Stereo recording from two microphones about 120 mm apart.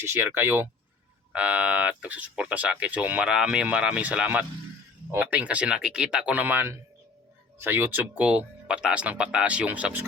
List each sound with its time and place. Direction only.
0.0 s speech: 20° right (ahead or behind)